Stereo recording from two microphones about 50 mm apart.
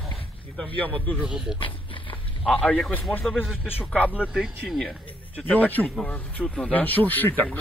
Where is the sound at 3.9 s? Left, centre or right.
Left.